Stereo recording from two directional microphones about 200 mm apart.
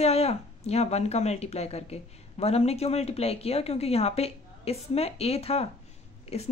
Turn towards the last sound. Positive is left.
turn(degrees=30)  # may be behind; listen again after turning